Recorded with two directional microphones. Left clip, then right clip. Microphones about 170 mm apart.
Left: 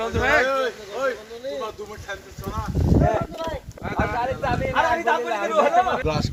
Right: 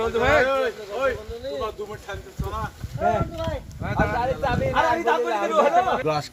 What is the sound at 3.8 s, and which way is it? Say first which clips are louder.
Speech: right 1 dB; 70° right (ahead or behind).